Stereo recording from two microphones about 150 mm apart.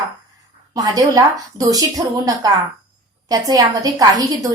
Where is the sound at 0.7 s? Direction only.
25° right (ahead or behind).